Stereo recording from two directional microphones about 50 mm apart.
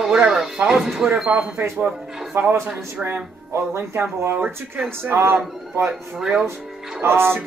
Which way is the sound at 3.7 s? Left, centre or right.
Right.